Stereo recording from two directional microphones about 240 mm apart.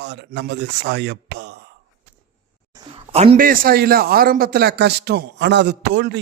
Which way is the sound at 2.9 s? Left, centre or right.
Right.